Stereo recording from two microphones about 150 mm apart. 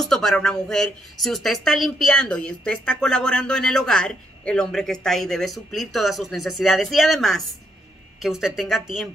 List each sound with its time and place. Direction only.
0.0 s speech: 5° left (ahead or behind)